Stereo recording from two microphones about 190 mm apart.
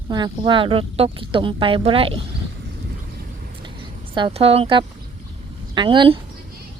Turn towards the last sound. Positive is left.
turn(degrees=-25)  # may be behind; listen again after turning